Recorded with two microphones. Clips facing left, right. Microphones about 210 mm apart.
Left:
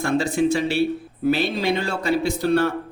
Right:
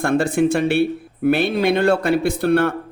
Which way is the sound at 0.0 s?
55° right (ahead or behind).